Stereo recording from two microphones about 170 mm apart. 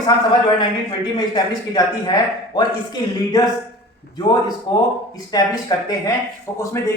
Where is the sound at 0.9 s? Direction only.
25° left (ahead or behind).